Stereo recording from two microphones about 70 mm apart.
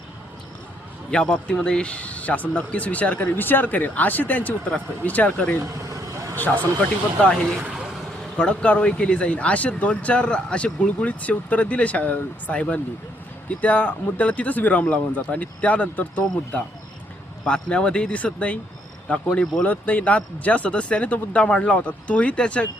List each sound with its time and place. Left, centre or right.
1.1 s speech: centre
8.4 s speech: centre
17.4 s speech: centre